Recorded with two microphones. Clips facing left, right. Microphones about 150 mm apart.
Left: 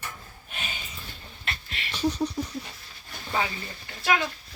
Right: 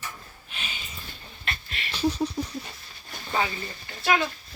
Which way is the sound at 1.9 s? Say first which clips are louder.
Right 1 dB; centre (ahead or behind).